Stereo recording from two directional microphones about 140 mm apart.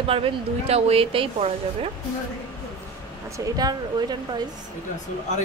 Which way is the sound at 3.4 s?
25° right (ahead or behind).